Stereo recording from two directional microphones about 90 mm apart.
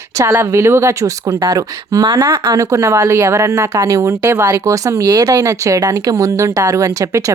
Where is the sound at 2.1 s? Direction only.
30° right (ahead or behind).